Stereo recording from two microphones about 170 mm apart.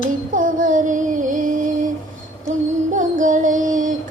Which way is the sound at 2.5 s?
50° right (ahead or behind).